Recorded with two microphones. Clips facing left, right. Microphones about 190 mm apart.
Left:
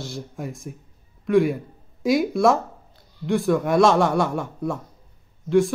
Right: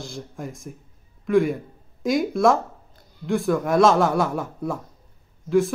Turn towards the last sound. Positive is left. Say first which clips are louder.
# left 1 dB
turn(degrees=0)  # may be behind; listen again after turning